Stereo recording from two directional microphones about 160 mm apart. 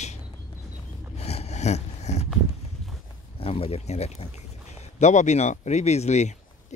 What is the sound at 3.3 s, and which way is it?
Speech, 35° left (ahead or behind).